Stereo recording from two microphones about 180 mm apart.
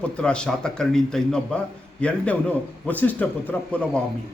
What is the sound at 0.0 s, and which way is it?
A man's voice, 5° left (ahead or behind).